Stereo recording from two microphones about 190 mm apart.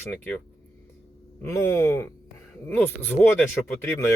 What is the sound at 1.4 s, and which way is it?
Speech, 15° left (ahead or behind).